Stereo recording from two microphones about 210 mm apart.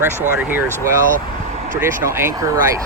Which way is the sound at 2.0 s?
15° right (ahead or behind).